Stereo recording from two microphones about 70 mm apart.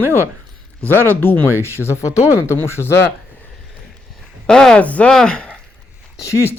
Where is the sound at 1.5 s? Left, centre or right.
Right.